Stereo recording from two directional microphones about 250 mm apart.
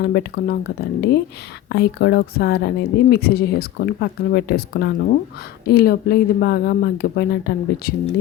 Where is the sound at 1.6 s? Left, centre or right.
Left.